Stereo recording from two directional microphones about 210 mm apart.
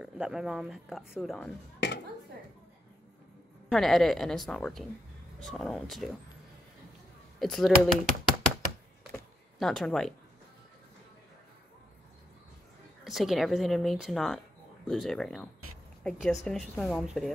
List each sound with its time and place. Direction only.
0.0 s speech: 5° right (ahead or behind)
3.6 s speech: centre (ahead or behind)
7.3 s speech: centre (ahead or behind)
9.1 s a sound: centre (ahead or behind)
13.0 s speech: centre (ahead or behind)